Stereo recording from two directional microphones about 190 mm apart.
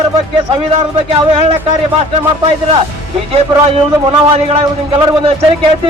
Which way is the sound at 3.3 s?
30° right (ahead or behind).